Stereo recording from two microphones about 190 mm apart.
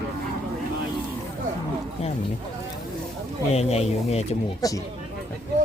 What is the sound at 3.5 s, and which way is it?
Speech, 35° left (ahead or behind).